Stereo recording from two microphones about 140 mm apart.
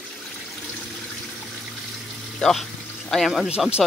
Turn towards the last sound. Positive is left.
turn(degrees=0)  # may be behind; listen again after turning